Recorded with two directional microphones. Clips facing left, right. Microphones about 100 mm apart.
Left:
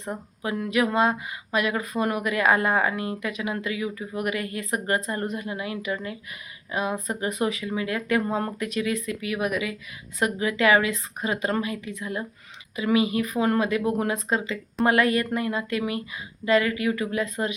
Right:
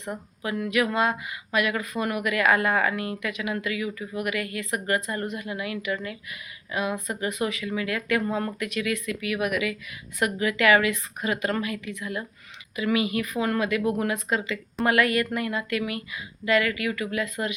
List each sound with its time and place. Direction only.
0.0 s speech: 30° left (ahead or behind)